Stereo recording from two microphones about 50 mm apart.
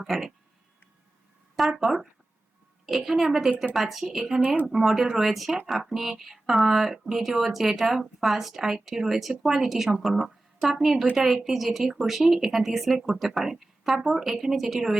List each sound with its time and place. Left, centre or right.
0.1 s a woman's voice: centre
1.8 s a woman's voice: centre
4.4 s speech: right
4.7 s a woman's voice: centre